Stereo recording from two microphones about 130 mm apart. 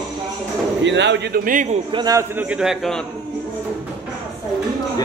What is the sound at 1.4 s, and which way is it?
Speech, 85° right.